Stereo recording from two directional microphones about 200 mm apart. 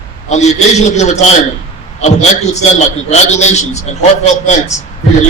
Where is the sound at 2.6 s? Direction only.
35° left (ahead or behind).